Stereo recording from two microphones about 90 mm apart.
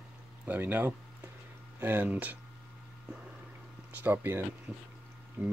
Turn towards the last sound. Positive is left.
turn(degrees=-20)  # may be behind; listen again after turning